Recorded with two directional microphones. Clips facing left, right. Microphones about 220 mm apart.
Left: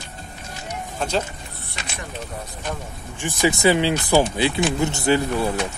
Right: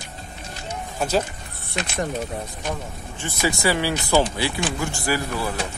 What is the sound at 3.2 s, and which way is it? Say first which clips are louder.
Speech: left 4 dB; 20° left (ahead or behind).